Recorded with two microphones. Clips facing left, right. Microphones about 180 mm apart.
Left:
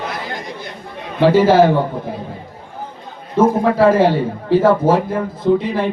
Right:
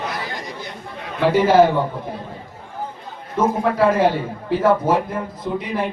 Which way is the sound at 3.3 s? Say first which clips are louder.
Left 5 dB; 30° left (ahead or behind).